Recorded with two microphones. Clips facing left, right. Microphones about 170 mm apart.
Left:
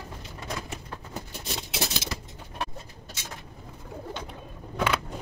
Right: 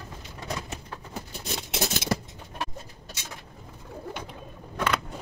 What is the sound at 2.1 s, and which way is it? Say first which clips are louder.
Bird: right 10 dB; 55° right (ahead or behind).